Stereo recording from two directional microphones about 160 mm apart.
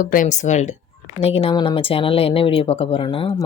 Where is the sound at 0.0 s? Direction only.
55° left (ahead or behind).